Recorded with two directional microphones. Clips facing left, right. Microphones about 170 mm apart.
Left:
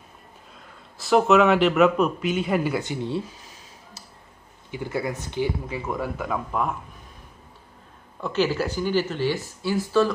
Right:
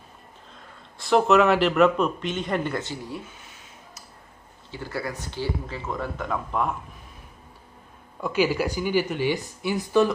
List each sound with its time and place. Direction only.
0.9 s speech: centre (ahead or behind)
2.9 s speech: 25° left (ahead or behind)
3.3 s a sound: 35° left (ahead or behind)
4.6 s speech: 20° left (ahead or behind); by 6.8 s centre (ahead or behind)
8.2 s speech: 10° right (ahead or behind)